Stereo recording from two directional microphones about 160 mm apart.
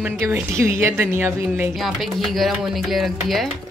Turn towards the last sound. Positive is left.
turn(degrees=0)  # may be behind; listen again after turning